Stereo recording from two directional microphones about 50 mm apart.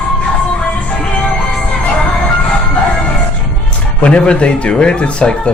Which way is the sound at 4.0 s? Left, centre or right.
Left.